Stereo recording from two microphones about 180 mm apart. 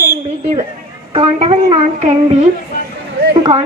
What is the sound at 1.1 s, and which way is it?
Speech, 35° right (ahead or behind).